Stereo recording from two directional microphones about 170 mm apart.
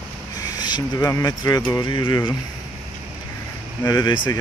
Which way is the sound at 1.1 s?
20° left (ahead or behind).